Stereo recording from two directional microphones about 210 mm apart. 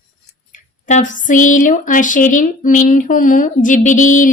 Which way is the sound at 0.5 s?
35° left (ahead or behind).